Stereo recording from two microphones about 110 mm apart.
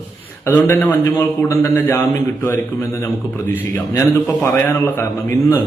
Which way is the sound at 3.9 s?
30° left (ahead or behind).